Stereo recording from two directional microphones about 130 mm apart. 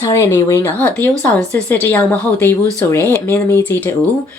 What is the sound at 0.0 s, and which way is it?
Speech, 20° left (ahead or behind).